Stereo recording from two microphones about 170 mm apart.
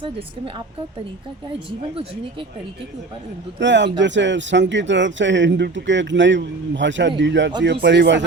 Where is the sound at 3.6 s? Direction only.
90° right.